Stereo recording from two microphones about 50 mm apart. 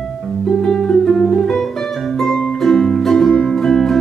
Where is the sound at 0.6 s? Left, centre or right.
Centre.